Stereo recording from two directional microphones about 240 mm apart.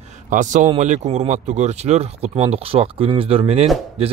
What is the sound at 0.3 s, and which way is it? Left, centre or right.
Speech, right.